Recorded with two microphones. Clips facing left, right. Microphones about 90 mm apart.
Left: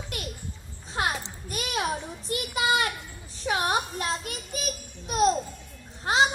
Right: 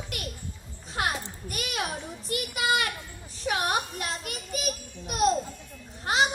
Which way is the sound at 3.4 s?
25° left (ahead or behind).